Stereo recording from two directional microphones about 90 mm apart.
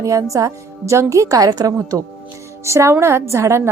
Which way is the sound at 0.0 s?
35° right (ahead or behind).